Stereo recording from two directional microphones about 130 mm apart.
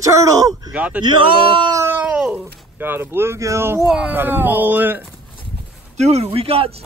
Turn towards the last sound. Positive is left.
turn(degrees=-45)  # may be behind; listen again after turning